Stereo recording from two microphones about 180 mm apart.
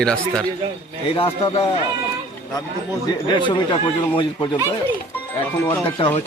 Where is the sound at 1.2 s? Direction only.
30° left (ahead or behind).